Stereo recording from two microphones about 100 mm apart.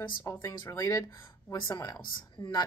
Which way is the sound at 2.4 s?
55° left (ahead or behind).